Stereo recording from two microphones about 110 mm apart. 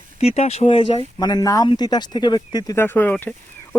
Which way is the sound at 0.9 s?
35° left (ahead or behind).